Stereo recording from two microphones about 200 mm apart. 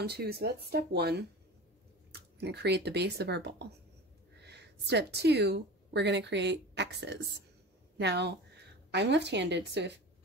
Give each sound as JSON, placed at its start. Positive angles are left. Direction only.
{"t": 0.0, "sound": "a woman's voice", "side_deg": -50}